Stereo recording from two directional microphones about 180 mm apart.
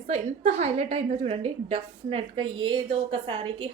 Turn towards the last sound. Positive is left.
turn(degrees=-30)  # may be behind; listen again after turning